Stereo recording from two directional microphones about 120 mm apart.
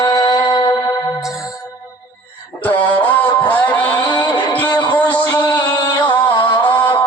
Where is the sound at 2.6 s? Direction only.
15° left (ahead or behind).